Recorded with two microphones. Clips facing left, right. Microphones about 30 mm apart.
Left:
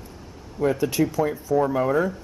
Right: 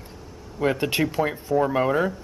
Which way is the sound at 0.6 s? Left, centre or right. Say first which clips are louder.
Left 1 dB; right.